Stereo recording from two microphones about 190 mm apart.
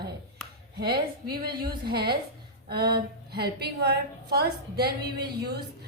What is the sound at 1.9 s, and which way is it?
A woman's voice, 55° right (ahead or behind).